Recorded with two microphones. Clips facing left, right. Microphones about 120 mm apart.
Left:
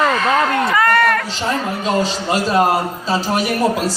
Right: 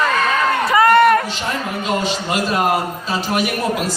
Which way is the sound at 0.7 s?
20° right (ahead or behind).